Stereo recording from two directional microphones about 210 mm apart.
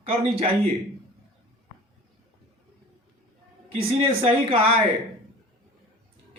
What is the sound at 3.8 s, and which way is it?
Speech, 25° right (ahead or behind).